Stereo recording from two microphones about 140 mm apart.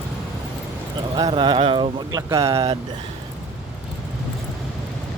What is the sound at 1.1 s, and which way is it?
Speech, 35° right (ahead or behind).